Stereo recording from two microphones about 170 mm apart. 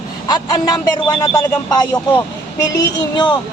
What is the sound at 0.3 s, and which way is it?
Speech, 20° left (ahead or behind).